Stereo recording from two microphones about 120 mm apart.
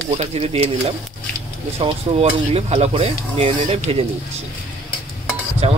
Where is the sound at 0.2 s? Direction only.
60° right (ahead or behind).